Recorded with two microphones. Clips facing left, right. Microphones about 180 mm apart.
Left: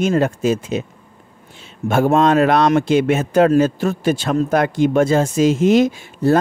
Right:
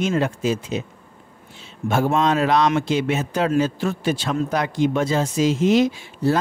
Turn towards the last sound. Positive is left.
turn(degrees=50)  # may be behind; listen again after turning